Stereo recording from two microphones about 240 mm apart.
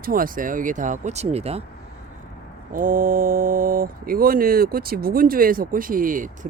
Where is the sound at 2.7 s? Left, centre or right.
Right.